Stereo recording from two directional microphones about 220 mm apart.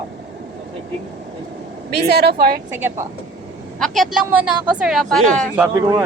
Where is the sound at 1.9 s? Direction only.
45° right (ahead or behind).